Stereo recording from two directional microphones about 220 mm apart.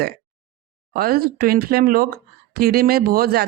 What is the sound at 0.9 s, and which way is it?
A man's voice, 45° right (ahead or behind).